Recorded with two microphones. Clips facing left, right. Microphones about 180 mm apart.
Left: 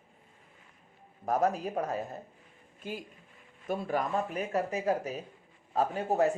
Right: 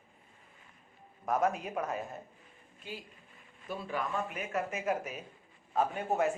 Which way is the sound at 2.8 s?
50° left (ahead or behind).